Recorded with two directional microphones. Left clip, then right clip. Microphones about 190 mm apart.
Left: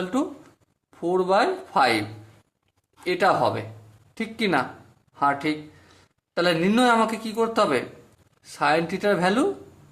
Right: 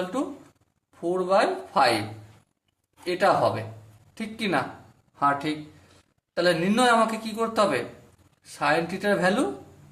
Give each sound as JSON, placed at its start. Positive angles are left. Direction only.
{"t": 0.9, "sound": "a man's voice", "side_deg": 35}
{"t": 3.0, "sound": "a man's voice", "side_deg": 35}